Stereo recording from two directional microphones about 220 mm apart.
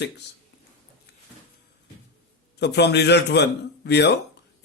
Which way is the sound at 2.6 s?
50° left (ahead or behind).